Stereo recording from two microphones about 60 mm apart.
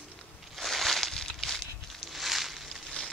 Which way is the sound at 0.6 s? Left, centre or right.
Centre.